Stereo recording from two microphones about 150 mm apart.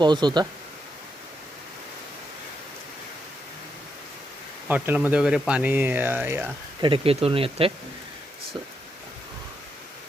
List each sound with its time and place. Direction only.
0.0 s speech: 30° right (ahead or behind)
4.7 s speech: 10° right (ahead or behind)
6.8 s speech: 35° right (ahead or behind)